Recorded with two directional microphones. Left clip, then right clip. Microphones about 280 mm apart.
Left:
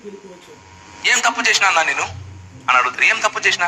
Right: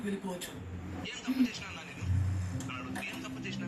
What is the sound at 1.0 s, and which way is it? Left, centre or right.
A man's voice, left.